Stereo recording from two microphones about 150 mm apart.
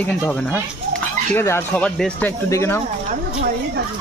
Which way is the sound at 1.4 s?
15° left (ahead or behind).